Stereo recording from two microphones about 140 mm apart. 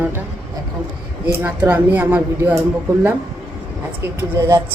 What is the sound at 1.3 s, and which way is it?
A woman's voice, 15° right (ahead or behind).